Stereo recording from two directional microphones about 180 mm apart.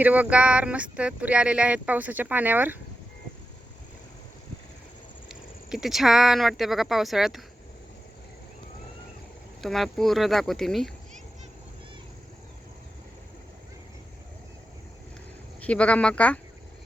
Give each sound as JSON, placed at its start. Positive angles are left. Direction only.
{"t": 0.0, "sound": "speech", "side_deg": -10}
{"t": 5.3, "sound": "speech", "side_deg": -5}
{"t": 9.6, "sound": "speech", "side_deg": 0}
{"t": 15.6, "sound": "speech", "side_deg": 5}